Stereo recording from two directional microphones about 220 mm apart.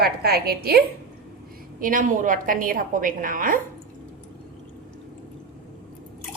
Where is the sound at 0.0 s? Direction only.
45° right (ahead or behind).